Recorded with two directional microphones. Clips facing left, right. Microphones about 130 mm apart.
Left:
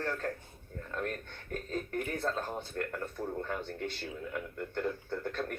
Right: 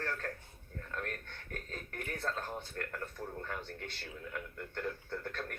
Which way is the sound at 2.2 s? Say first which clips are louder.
Left 4 dB; 15° left (ahead or behind).